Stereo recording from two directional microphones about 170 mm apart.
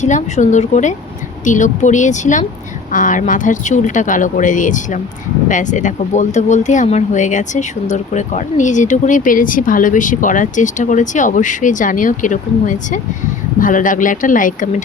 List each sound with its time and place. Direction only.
0.0 s speech: 45° left (ahead or behind)